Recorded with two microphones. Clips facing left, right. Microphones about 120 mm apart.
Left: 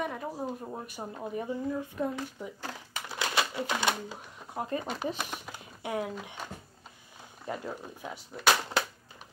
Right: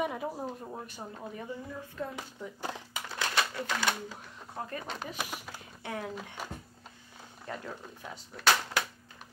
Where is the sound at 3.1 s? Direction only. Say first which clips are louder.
Left 1 dB; 15° left (ahead or behind).